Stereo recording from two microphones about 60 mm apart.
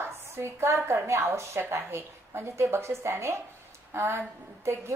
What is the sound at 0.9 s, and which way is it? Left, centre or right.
A woman's voice, right.